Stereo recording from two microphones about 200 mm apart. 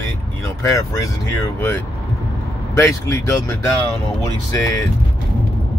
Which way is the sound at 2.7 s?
15° left (ahead or behind).